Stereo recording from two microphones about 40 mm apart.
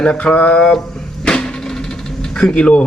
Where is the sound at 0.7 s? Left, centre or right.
Centre.